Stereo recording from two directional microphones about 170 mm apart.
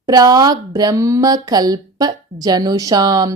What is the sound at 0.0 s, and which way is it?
A woman's voice, 20° right (ahead or behind).